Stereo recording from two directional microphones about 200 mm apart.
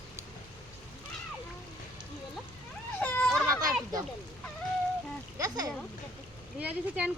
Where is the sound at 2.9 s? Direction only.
10° left (ahead or behind).